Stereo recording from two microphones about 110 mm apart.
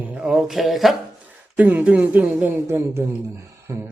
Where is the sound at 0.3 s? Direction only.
5° right (ahead or behind).